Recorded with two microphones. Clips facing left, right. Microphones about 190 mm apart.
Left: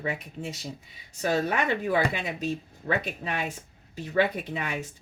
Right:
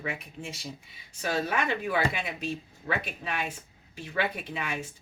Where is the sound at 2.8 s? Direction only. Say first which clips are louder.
Left 4 dB; 40° left (ahead or behind).